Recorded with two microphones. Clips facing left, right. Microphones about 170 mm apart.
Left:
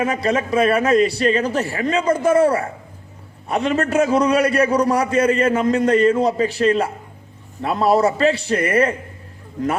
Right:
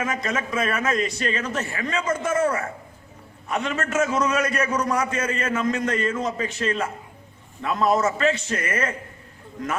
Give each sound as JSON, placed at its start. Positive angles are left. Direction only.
{"t": 0.0, "sound": "a man's voice", "side_deg": 35}